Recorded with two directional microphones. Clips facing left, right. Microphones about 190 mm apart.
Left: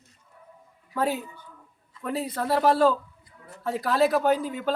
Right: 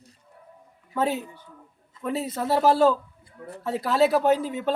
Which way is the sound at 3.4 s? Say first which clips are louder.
Right 1 dB; 30° right (ahead or behind).